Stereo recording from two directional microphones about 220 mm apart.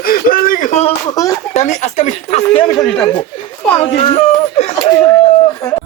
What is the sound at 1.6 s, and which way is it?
Speech, 30° left (ahead or behind).